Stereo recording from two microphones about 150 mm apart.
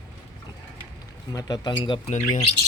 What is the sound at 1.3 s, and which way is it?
Speech, 25° left (ahead or behind).